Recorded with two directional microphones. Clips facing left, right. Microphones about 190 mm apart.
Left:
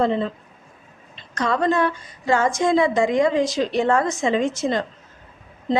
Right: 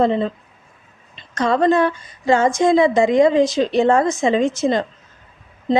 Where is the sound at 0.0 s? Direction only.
20° right (ahead or behind).